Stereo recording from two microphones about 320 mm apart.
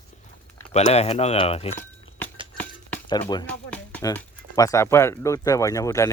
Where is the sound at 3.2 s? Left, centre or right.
Centre.